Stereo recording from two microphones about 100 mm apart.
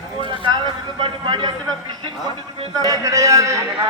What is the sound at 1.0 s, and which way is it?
Speech, 55° right (ahead or behind).